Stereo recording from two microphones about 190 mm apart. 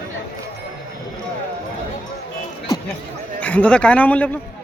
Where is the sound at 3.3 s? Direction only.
5° left (ahead or behind).